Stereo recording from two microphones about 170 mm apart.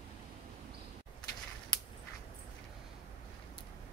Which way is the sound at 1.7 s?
25° left (ahead or behind).